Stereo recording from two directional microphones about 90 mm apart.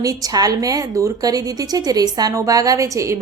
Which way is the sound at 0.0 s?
40° right (ahead or behind).